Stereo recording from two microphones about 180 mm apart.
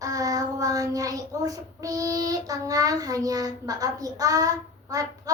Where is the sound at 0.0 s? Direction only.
20° right (ahead or behind).